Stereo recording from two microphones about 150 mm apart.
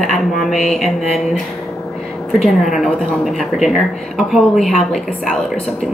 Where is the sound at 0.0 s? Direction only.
Centre (ahead or behind).